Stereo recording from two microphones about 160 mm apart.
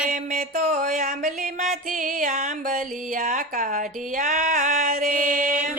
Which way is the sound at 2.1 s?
55° right (ahead or behind).